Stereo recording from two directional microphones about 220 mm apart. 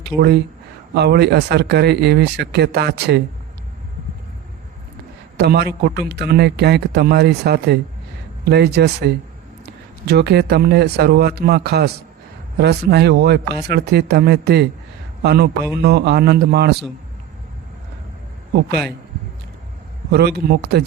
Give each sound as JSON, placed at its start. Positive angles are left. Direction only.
{"t": 0.1, "sound": "speech", "side_deg": -5}
{"t": 0.9, "sound": "a man's voice", "side_deg": -50}
{"t": 5.4, "sound": "a man's voice", "side_deg": -45}
{"t": 20.1, "sound": "a man's voice", "side_deg": -50}